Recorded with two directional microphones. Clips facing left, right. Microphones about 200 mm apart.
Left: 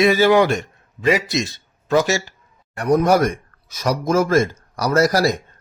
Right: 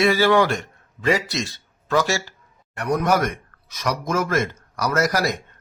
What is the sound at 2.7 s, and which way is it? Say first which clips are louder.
A man's voice: left 5 dB; 35° left (ahead or behind).